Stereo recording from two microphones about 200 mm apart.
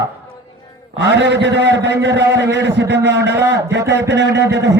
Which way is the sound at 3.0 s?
60° right (ahead or behind).